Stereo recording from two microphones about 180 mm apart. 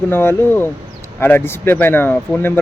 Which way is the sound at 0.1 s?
10° left (ahead or behind).